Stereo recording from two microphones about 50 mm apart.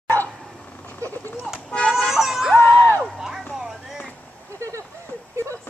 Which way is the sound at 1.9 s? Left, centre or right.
Centre.